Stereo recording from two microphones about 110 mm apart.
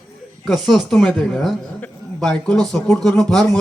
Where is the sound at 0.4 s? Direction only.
Centre (ahead or behind).